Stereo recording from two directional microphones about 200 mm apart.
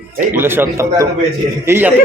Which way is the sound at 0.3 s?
10° right (ahead or behind).